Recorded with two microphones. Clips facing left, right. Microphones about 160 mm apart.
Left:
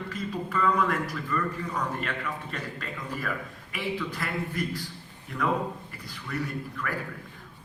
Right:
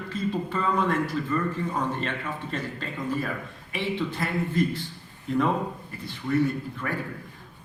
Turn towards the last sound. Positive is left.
turn(degrees=-25)  # may be behind; listen again after turning